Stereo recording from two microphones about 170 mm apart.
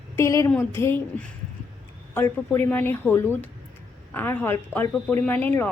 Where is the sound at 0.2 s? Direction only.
15° left (ahead or behind).